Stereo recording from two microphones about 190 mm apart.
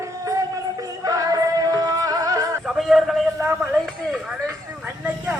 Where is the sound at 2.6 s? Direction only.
Centre (ahead or behind).